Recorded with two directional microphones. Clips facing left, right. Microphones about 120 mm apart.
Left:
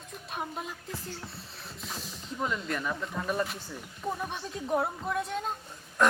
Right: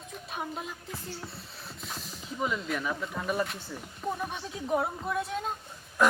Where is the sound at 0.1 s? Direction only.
Centre (ahead or behind).